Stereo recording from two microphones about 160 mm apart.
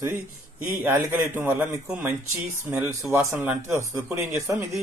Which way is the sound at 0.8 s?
15° right (ahead or behind).